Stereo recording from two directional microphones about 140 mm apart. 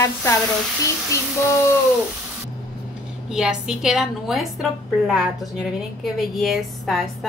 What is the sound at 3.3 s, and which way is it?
A woman's voice, 5° right (ahead or behind).